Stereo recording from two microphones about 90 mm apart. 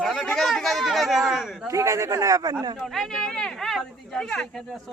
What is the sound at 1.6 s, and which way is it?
A man's voice, 35° right (ahead or behind).